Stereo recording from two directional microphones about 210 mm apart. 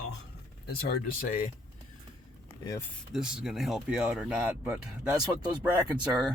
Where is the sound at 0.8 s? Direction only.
45° left (ahead or behind).